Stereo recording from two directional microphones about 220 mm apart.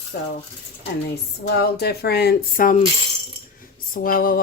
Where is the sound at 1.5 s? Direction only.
50° left (ahead or behind).